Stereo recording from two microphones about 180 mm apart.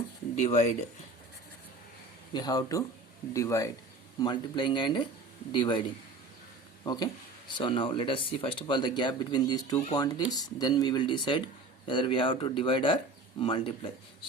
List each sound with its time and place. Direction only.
0.3 s speech: 40° left (ahead or behind)
2.3 s speech: 20° left (ahead or behind)
6.8 s speech: 20° left (ahead or behind)